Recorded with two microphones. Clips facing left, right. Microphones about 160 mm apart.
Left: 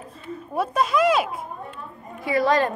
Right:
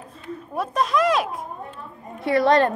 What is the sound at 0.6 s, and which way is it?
Speech, 5° left (ahead or behind).